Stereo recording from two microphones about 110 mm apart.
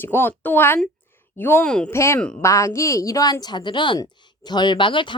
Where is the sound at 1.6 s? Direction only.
10° left (ahead or behind).